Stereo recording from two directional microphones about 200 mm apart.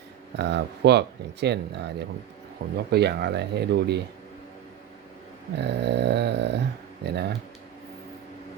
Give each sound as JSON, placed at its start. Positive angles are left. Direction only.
{"t": 0.3, "sound": "speech", "side_deg": -60}
{"t": 5.5, "sound": "speech", "side_deg": -60}